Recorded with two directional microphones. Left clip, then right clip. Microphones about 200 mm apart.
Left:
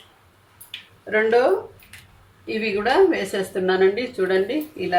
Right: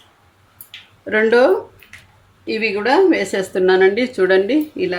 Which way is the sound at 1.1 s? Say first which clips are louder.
Right 4 dB; 55° right (ahead or behind).